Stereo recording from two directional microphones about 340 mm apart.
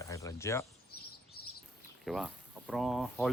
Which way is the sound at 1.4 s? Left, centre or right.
Left.